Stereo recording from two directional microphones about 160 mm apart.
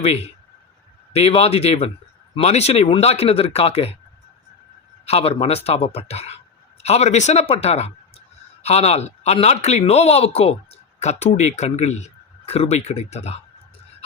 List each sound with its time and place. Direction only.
1.1 s speech: 40° left (ahead or behind)
5.0 s speech: 40° left (ahead or behind)